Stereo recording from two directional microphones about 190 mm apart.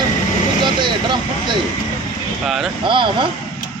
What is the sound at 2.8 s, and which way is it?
Speech, 25° right (ahead or behind).